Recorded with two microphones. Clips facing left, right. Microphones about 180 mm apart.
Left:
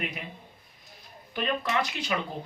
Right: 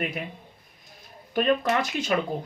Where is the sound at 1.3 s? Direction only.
50° right (ahead or behind).